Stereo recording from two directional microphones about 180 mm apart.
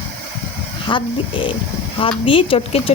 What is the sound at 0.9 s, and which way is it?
Speech, 30° left (ahead or behind).